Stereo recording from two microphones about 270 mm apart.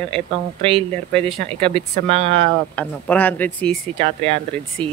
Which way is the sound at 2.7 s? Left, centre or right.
Centre.